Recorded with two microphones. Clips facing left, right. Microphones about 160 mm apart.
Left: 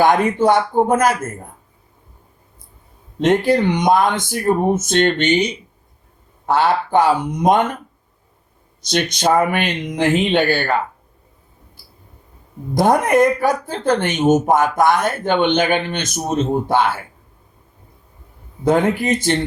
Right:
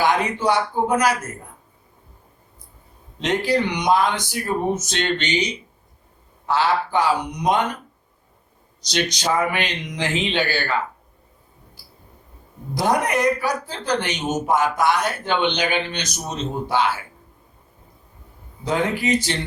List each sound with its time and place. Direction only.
0.0 s speech: 50° left (ahead or behind)
3.2 s speech: 50° left (ahead or behind)
8.8 s speech: 55° left (ahead or behind)
12.7 s speech: 50° left (ahead or behind)
18.6 s speech: 50° left (ahead or behind)